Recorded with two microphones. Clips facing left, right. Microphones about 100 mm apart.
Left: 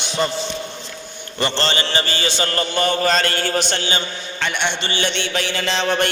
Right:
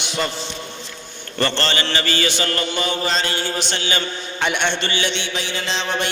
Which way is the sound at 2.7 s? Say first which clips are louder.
Left 7 dB; 50° left (ahead or behind).